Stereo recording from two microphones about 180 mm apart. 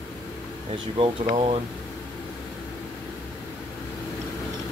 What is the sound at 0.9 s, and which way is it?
Speech, 30° right (ahead or behind).